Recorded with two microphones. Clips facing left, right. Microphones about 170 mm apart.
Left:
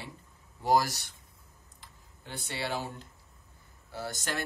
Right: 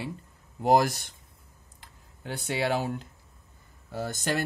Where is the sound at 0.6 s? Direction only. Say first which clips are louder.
Right 4 dB; 55° right (ahead or behind).